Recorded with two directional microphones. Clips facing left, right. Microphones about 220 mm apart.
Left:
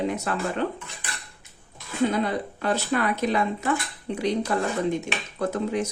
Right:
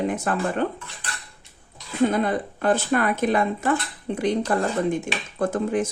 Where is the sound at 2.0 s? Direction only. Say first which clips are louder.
Right 2 dB; 50° right (ahead or behind).